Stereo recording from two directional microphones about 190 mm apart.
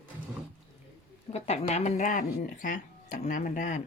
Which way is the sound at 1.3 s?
35° left (ahead or behind).